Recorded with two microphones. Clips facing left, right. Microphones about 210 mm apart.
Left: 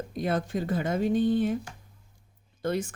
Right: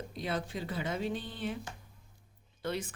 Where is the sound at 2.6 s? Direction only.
45° left (ahead or behind).